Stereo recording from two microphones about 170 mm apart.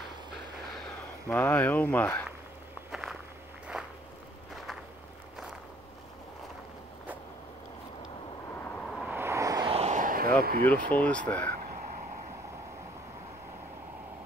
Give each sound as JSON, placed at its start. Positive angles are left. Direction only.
{"t": 1.3, "sound": "speech", "side_deg": 10}
{"t": 2.9, "sound": "a sound", "side_deg": -5}
{"t": 3.7, "sound": "walk", "side_deg": -5}
{"t": 8.6, "sound": "vehicle", "side_deg": 5}
{"t": 9.0, "sound": "vehicle", "side_deg": -15}
{"t": 9.7, "sound": "a sound", "side_deg": -40}
{"t": 10.9, "sound": "speech", "side_deg": 10}